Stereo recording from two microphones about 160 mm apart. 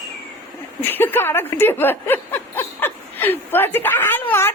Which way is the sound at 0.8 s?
10° left (ahead or behind).